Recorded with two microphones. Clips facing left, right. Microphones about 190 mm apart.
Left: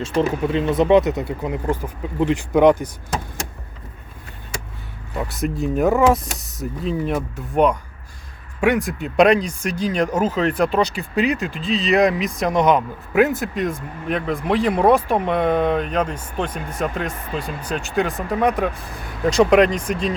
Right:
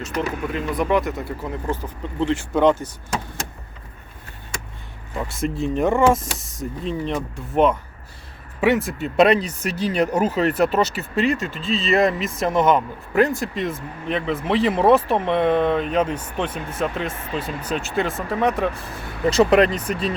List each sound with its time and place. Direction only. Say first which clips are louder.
0.0 s speech: left 5 dB; 30° left (ahead or behind); by 2.9 s 15° left (ahead or behind)
5.1 s speech: left 1 dB; centre (ahead or behind)
8.9 s speech: left 1 dB; centre (ahead or behind)
17.7 s speech: left 3 dB; centre (ahead or behind)